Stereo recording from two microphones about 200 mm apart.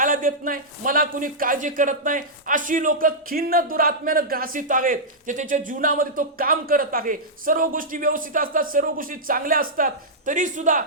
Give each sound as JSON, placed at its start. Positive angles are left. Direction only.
{"t": 0.0, "sound": "a man's voice", "side_deg": -45}